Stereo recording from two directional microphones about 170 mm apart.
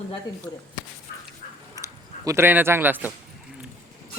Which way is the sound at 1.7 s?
20° right (ahead or behind).